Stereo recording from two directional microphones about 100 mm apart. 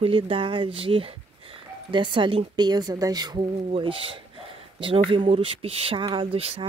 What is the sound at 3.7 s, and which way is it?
Speech, 65° right (ahead or behind).